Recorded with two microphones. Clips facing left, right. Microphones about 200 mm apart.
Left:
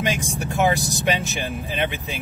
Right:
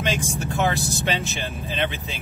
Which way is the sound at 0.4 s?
15° left (ahead or behind).